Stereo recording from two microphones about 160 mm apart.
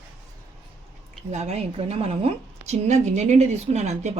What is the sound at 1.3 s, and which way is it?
A woman's voice, 45° right (ahead or behind).